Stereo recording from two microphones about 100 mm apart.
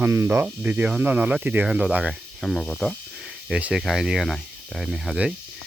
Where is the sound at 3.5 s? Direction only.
10° right (ahead or behind).